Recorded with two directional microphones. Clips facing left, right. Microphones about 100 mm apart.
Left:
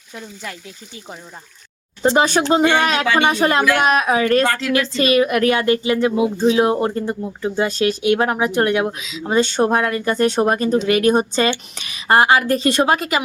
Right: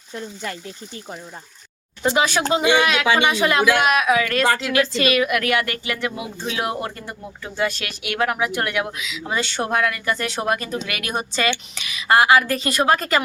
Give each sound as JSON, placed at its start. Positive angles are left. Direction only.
{"t": 0.1, "sound": "speech", "side_deg": 5}
{"t": 2.0, "sound": "speech", "side_deg": 30}
{"t": 4.4, "sound": "a woman's voice", "side_deg": -15}
{"t": 5.0, "sound": "a woman's voice", "side_deg": 30}